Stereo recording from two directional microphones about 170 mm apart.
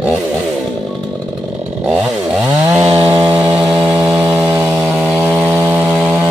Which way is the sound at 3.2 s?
30° right (ahead or behind).